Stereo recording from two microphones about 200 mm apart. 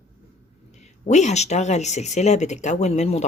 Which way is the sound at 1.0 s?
35° left (ahead or behind).